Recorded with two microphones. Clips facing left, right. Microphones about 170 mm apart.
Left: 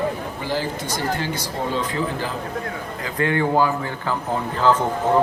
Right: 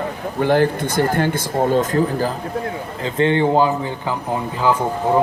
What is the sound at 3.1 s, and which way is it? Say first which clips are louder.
Speech: right 4 dB; 25° right (ahead or behind).